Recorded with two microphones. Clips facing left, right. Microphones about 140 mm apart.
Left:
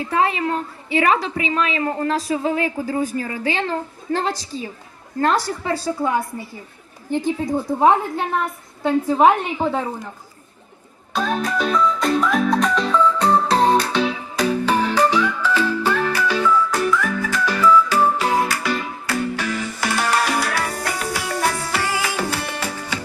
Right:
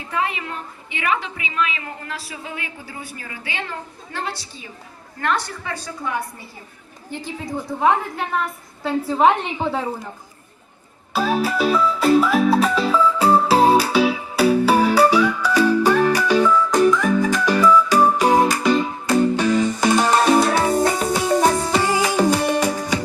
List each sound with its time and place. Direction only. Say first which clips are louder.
0.1 s a woman's voice: left 5 dB; 35° left (ahead or behind)
7.2 s a woman's voice: left 9 dB; 50° left (ahead or behind)
7.8 s a woman's voice: left 2 dB; 30° left (ahead or behind)
9.0 s a woman's voice: left 1 dB; 5° left (ahead or behind)
11.1 s music: right 2 dB; 5° right (ahead or behind)